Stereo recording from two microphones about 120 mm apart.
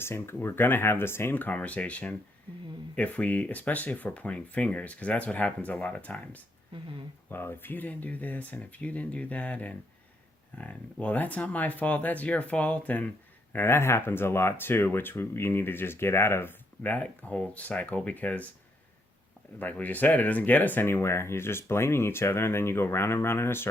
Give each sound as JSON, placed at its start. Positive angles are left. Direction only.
{"t": 0.0, "sound": "speech", "side_deg": 20}
{"t": 11.0, "sound": "speech", "side_deg": 10}
{"t": 19.5, "sound": "speech", "side_deg": 15}